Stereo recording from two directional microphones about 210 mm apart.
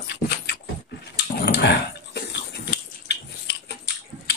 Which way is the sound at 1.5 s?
55° left (ahead or behind).